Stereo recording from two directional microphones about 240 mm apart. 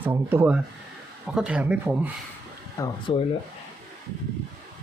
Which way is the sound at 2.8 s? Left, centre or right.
Centre.